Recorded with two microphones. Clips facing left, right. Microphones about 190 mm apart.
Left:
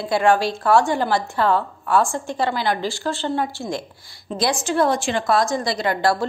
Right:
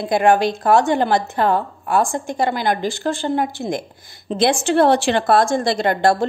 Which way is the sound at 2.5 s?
50° right (ahead or behind).